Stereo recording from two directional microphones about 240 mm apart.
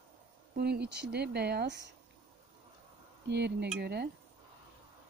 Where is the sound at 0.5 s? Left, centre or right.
Right.